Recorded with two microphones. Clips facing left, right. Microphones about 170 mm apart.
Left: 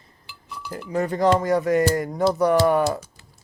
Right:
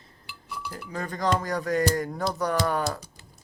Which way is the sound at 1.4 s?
20° left (ahead or behind).